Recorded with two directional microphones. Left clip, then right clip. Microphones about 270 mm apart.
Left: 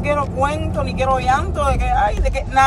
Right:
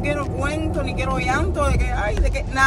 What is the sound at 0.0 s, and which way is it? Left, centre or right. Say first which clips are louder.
Speech: left 6 dB; centre.